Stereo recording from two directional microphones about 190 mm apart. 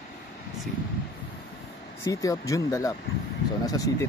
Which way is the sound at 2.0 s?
15° left (ahead or behind).